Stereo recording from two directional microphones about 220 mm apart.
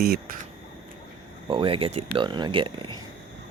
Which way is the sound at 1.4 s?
25° right (ahead or behind).